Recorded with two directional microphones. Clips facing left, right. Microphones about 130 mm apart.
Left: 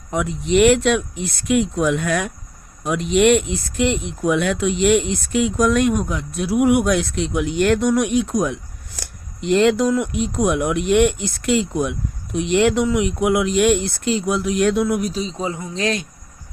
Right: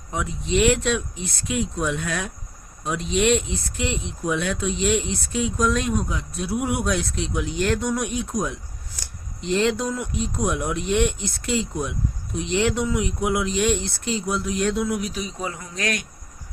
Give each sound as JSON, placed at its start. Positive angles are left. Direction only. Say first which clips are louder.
{"t": 0.1, "sound": "speech", "louder": "left 6 dB", "side_deg": 65}
{"t": 9.0, "sound": "speech", "louder": "left 6 dB", "side_deg": 65}
{"t": 15.1, "sound": "speech", "louder": "left 5 dB", "side_deg": 25}